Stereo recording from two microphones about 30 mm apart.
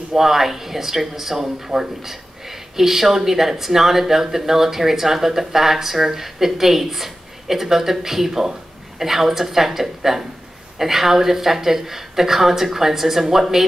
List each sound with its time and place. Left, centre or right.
0.1 s speech: centre